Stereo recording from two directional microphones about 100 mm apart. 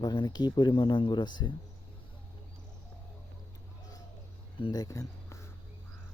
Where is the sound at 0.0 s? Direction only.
40° left (ahead or behind).